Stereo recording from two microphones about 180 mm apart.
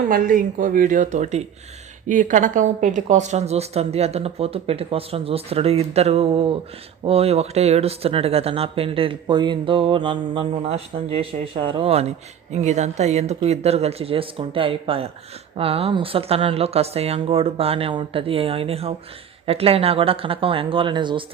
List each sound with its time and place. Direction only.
0.1 s speech: 50° right (ahead or behind); by 21.2 s 25° right (ahead or behind)